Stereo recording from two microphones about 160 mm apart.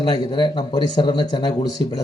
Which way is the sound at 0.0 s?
25° left (ahead or behind).